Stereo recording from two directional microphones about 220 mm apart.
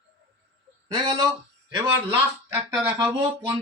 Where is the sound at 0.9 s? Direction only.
20° right (ahead or behind).